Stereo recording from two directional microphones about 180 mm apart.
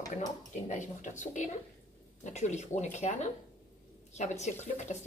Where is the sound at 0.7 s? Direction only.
45° left (ahead or behind).